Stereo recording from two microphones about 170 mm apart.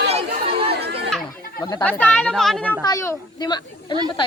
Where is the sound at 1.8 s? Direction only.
10° left (ahead or behind).